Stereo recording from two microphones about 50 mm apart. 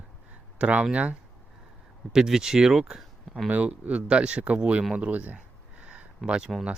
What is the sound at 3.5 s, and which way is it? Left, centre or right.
A man's voice, right.